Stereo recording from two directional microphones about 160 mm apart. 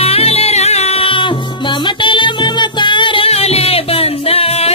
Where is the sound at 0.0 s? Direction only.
40° left (ahead or behind).